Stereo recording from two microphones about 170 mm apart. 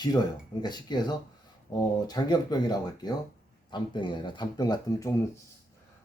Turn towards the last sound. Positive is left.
turn(degrees=20)  # may be behind; listen again after turning